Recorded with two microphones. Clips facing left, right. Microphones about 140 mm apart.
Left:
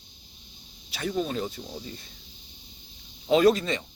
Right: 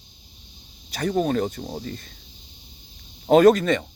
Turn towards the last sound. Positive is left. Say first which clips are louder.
# right 6 dB
turn(degrees=-55)  # may be behind; listen again after turning